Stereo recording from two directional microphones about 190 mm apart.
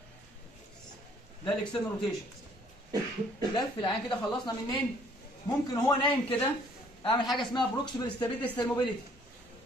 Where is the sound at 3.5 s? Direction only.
20° left (ahead or behind).